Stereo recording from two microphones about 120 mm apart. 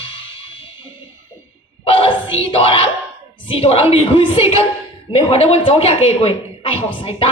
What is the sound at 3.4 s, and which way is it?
A woman's voice, 55° left (ahead or behind).